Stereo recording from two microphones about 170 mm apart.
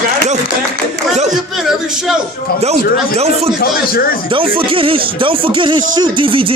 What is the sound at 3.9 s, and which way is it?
Speech, 60° left (ahead or behind).